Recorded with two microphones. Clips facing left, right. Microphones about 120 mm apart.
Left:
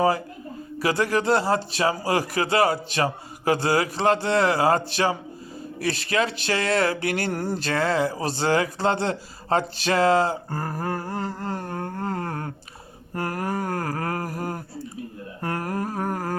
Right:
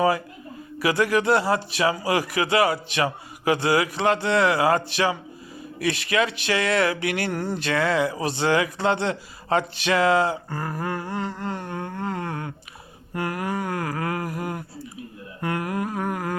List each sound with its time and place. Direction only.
0.8 s speech: 30° left (ahead or behind)